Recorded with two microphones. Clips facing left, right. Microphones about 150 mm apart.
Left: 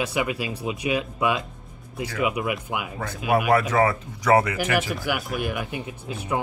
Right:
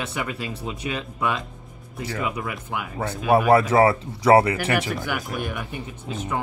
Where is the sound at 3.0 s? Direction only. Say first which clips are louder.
Right 4 dB; 30° right (ahead or behind).